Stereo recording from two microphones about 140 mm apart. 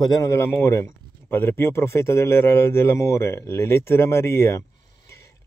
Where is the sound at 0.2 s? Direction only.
20° left (ahead or behind).